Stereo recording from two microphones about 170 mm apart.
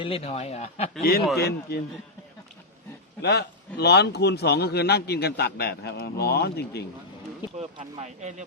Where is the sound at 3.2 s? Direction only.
75° left (ahead or behind).